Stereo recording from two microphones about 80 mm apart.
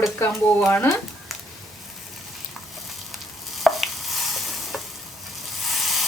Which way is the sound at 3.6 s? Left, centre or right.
Centre.